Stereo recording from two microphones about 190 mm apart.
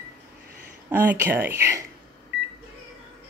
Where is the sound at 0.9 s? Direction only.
10° right (ahead or behind).